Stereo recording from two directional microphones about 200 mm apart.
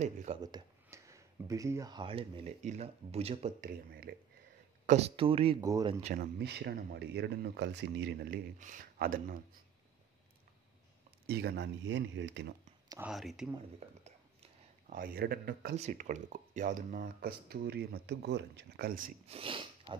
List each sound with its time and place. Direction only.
0.0 s speech: 35° right (ahead or behind)
0.4 s speech: 20° right (ahead or behind)
4.8 s speech: 30° right (ahead or behind)
5.6 s speech: 15° right (ahead or behind)
5.9 s speech: 40° right (ahead or behind); by 8.4 s 55° right (ahead or behind)
8.5 s speech: 40° right (ahead or behind)
11.2 s speech: 55° right (ahead or behind)
13.0 s speech: centre (ahead or behind)
13.8 s speech: 30° right (ahead or behind)
14.9 s speech: 45° right (ahead or behind)
15.7 s speech: 35° right (ahead or behind)
19.2 s speech: 25° right (ahead or behind)